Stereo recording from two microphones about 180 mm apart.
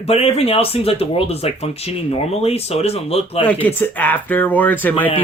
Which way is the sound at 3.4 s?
10° left (ahead or behind).